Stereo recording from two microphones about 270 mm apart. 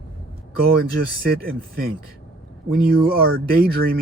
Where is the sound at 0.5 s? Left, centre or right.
Right.